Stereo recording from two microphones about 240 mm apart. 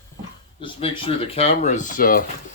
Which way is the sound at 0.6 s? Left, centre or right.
Left.